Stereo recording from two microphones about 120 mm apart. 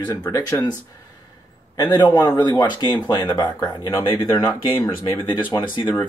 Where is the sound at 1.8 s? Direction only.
35° left (ahead or behind).